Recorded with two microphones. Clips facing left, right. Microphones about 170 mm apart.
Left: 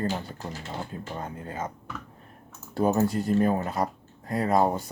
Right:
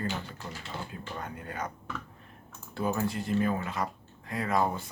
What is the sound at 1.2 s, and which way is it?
Speech, 30° left (ahead or behind).